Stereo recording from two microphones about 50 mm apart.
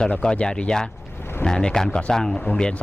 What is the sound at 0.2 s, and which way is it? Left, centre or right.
Speech, centre.